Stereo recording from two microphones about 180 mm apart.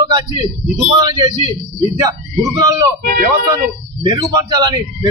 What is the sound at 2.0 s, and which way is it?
Speech, 20° right (ahead or behind).